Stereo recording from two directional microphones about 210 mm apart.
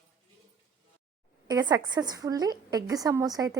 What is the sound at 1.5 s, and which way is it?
A woman's voice, 20° right (ahead or behind).